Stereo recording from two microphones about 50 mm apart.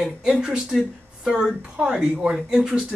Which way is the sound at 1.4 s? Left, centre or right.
Centre.